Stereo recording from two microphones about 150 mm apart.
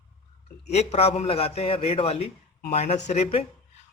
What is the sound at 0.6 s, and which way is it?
A man's voice, 45° left (ahead or behind).